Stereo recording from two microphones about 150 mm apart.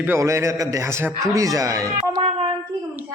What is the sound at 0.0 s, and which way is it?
A man's voice, 15° right (ahead or behind).